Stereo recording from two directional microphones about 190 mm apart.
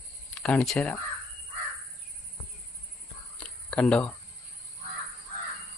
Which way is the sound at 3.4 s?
5° left (ahead or behind).